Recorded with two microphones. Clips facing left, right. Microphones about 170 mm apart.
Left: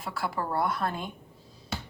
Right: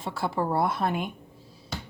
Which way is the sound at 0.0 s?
25° right (ahead or behind).